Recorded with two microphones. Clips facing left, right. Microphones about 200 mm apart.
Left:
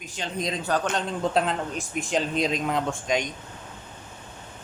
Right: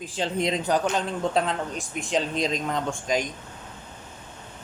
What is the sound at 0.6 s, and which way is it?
Speech, 10° right (ahead or behind).